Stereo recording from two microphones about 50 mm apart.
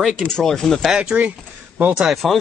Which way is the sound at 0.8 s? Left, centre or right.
Centre.